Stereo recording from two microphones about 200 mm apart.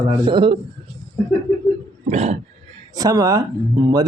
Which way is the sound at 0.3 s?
25° right (ahead or behind).